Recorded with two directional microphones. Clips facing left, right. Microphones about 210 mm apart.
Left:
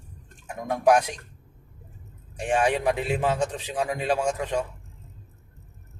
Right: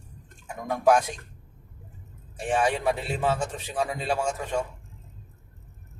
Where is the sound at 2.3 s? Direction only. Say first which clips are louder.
Left 2 dB; 15° left (ahead or behind).